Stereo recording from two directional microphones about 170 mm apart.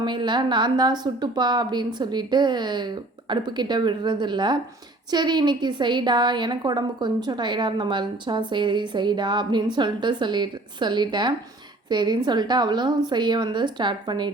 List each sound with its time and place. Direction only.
0.0 s a woman's voice: 25° right (ahead or behind)